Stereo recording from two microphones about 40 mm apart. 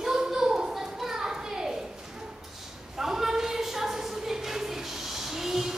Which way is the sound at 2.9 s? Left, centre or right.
Centre.